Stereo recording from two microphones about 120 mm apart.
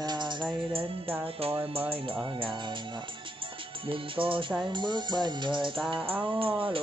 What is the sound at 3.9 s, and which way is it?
Music, 45° right (ahead or behind).